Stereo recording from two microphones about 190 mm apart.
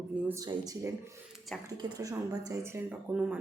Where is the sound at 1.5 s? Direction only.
5° left (ahead or behind).